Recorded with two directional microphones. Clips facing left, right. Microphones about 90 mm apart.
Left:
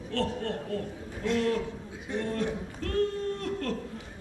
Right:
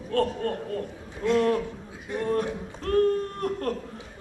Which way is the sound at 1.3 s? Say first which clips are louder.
Right 5 dB; 50° right (ahead or behind).